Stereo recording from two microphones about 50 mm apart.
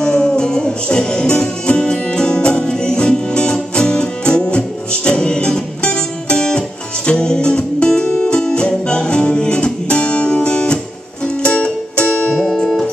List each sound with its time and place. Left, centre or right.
0.0 s music: centre
12.4 s music: centre